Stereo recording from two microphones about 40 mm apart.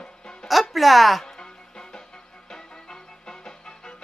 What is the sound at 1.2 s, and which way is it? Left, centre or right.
Music, centre.